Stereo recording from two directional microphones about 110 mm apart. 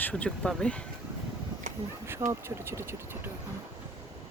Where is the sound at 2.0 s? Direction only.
25° right (ahead or behind).